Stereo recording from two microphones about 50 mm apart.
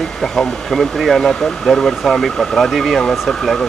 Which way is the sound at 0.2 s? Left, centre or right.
Centre.